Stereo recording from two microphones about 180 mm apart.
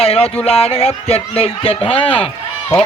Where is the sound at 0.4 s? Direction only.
35° left (ahead or behind).